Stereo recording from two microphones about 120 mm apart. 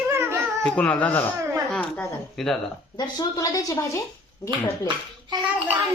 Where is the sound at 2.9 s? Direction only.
35° left (ahead or behind).